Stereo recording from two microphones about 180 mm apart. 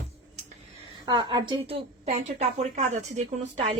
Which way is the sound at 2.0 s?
35° right (ahead or behind).